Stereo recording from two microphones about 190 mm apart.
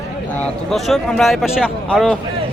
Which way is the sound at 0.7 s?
Centre (ahead or behind).